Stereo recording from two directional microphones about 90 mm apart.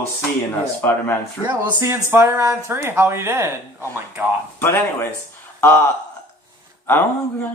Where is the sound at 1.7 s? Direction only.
30° right (ahead or behind).